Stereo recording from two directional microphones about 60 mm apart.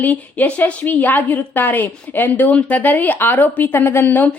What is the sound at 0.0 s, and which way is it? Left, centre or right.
A woman's voice, left.